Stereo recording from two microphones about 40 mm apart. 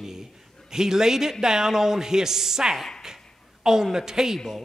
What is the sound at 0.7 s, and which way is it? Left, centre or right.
Speech, centre.